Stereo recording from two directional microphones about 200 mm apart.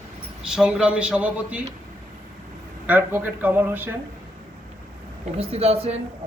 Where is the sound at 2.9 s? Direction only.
10° right (ahead or behind).